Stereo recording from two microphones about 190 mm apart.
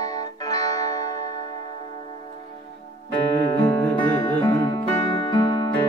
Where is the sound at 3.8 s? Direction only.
5° left (ahead or behind).